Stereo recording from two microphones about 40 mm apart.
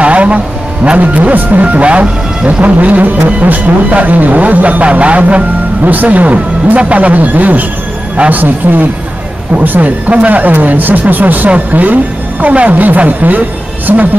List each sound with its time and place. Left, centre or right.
0.0 s vehicle: right
0.9 s speech: right
10.5 s speech: right